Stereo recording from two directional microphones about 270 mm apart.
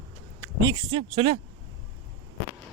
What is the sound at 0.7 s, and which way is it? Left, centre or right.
Speech, right.